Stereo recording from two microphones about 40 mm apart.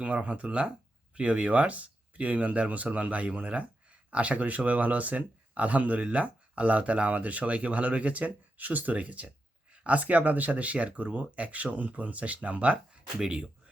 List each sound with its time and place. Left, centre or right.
0.0 s speech: right
13.2 s speech: right